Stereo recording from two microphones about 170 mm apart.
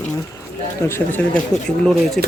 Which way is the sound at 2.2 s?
5° left (ahead or behind).